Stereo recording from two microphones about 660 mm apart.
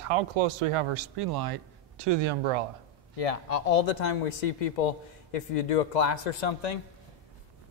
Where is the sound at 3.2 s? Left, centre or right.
Left.